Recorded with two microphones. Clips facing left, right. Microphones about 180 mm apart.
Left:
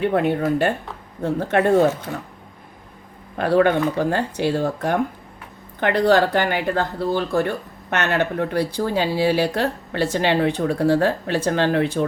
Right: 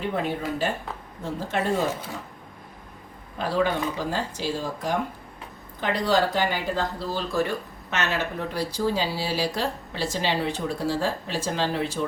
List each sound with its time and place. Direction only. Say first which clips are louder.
0.0 s speech: left 8 dB; 60° left (ahead or behind)
3.3 s speech: left 8 dB; 60° left (ahead or behind)